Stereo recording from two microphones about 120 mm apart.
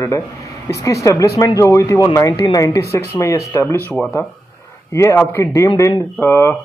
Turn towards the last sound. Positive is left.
turn(degrees=20)  # may be behind; listen again after turning